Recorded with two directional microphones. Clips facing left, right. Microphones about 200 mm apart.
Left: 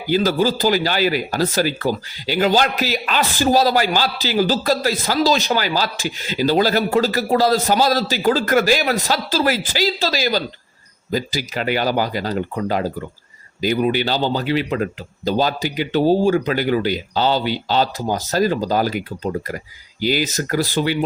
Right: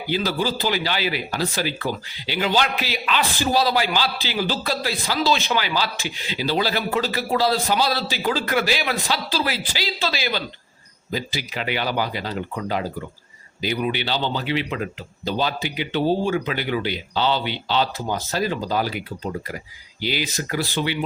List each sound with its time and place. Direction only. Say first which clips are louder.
0.1 s speech: left 6 dB; 45° left (ahead or behind)